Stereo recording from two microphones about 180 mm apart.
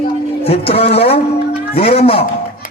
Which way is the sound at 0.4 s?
35° left (ahead or behind).